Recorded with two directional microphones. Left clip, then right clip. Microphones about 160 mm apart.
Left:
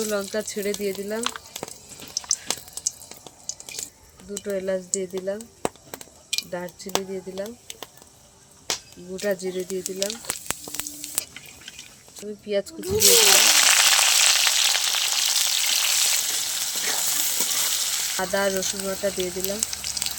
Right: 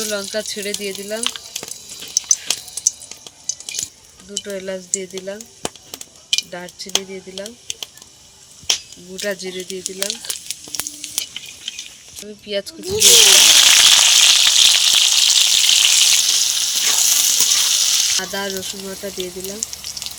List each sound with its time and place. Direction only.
0.0 s speech: 35° left (ahead or behind)
1.2 s speech: 20° left (ahead or behind)
2.2 s a sound: 20° left (ahead or behind)
4.4 s speech: 25° left (ahead or behind)
9.2 s speech: 30° left (ahead or behind)
9.6 s speech: 10° left (ahead or behind)
11.0 s a sound: centre (ahead or behind)
12.5 s speech: 35° left (ahead or behind)
13.0 s frying: centre (ahead or behind)
18.2 s speech: 15° left (ahead or behind)
19.2 s a sound: 10° left (ahead or behind)